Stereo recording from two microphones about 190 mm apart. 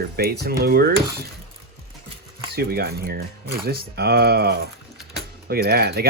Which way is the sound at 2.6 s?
55° right (ahead or behind).